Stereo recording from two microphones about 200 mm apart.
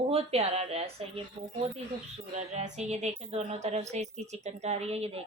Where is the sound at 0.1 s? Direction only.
30° right (ahead or behind).